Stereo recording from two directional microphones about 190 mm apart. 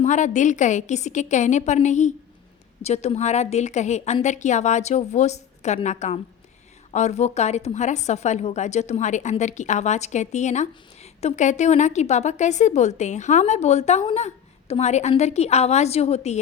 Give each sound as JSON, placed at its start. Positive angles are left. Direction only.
{"t": 0.0, "sound": "a woman's voice", "side_deg": 40}